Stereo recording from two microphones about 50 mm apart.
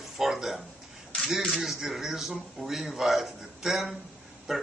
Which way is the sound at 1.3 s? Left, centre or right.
Centre.